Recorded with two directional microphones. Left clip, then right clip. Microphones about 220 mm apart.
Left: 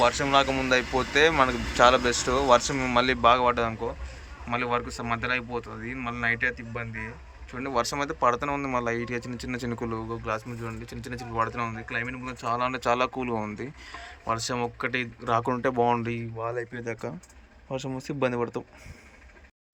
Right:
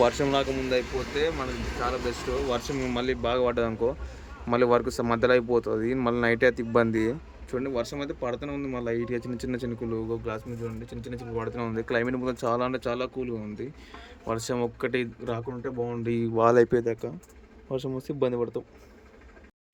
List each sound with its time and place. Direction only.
0.0 s speech: 15° right (ahead or behind)
1.1 s speech: 45° left (ahead or behind)
2.5 s speech: 5° right (ahead or behind); by 7.1 s 25° right (ahead or behind)
7.5 s speech: 10° right (ahead or behind)
15.4 s speech: 45° left (ahead or behind)
16.7 s speech: 10° right (ahead or behind)